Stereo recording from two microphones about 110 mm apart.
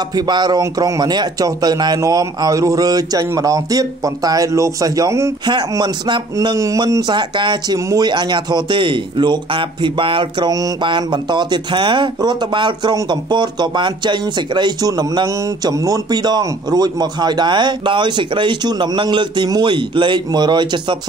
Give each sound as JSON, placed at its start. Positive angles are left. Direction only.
{"t": 0.1, "sound": "speech", "side_deg": -40}
{"t": 5.5, "sound": "speech", "side_deg": -40}
{"t": 6.3, "sound": "speech", "side_deg": -30}